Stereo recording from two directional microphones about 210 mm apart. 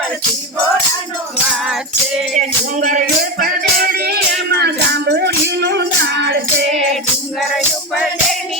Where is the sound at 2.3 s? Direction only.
35° right (ahead or behind); by 6.3 s 55° right (ahead or behind).